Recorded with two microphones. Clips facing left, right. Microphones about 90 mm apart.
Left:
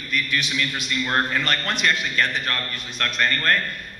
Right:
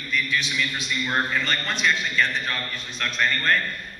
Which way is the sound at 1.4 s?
60° left (ahead or behind).